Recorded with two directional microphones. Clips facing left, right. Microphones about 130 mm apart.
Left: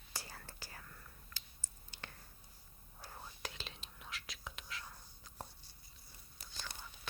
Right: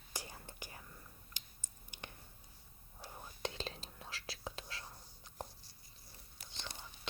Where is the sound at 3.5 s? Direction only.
35° right (ahead or behind).